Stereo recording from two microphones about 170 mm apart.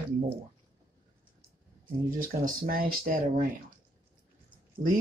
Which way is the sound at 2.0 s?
55° right (ahead or behind).